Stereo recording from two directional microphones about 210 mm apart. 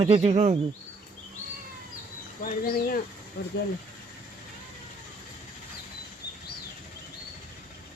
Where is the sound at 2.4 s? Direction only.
45° left (ahead or behind).